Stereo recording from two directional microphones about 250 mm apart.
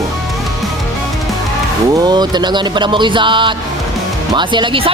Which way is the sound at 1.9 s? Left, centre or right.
Centre.